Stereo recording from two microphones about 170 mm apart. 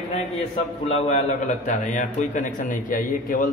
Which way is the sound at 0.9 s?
40° left (ahead or behind).